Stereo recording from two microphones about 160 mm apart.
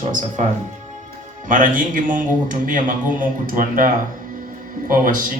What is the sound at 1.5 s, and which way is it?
Speech, 55° right (ahead or behind).